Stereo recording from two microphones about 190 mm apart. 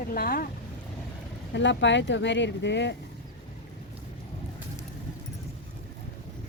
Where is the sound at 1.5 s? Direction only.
70° left (ahead or behind).